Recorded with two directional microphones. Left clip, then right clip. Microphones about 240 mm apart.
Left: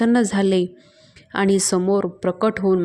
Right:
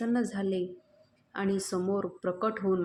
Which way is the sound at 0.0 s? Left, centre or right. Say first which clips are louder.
Left 13 dB; left.